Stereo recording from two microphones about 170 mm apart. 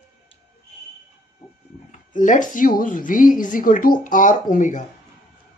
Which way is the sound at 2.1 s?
50° left (ahead or behind).